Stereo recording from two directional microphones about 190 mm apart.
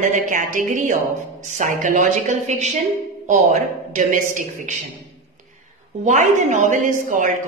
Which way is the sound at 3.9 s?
40° right (ahead or behind).